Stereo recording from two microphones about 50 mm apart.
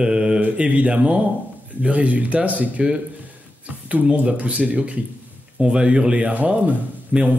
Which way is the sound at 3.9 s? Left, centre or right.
Right.